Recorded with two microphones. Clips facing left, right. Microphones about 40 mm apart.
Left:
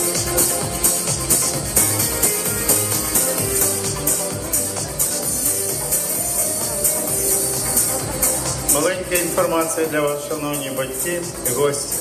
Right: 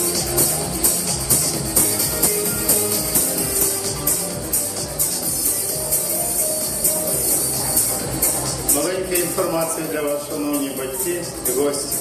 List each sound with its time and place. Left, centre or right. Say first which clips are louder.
2.2 s music: even; left
8.7 s music: left 2 dB; left
10.4 s a man's voice: right 1 dB; left